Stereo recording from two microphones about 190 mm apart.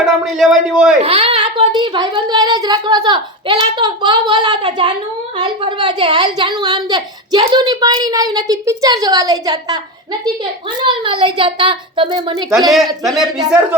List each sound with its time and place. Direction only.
0.0 s a man's voice: centre (ahead or behind)
1.0 s a woman's voice: 30° right (ahead or behind)
10.8 s a woman's voice: 25° right (ahead or behind)
12.7 s a man's voice: centre (ahead or behind)